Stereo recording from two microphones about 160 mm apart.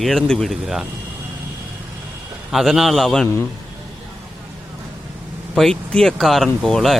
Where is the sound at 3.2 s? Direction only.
15° left (ahead or behind).